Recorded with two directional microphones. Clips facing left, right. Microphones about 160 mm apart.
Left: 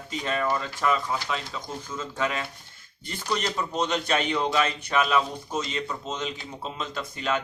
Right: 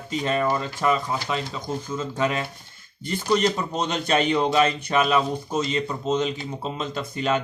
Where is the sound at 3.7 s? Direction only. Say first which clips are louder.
Right 3 dB; 30° right (ahead or behind).